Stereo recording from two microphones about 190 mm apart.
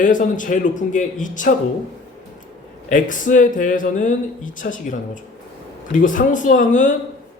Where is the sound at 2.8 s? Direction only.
40° left (ahead or behind).